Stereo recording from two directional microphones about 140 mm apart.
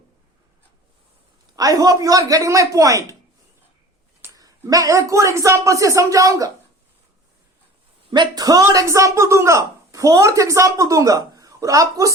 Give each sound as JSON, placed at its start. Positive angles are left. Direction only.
{"t": 1.5, "sound": "speech", "side_deg": -25}
{"t": 4.4, "sound": "speech", "side_deg": -25}
{"t": 8.1, "sound": "speech", "side_deg": -30}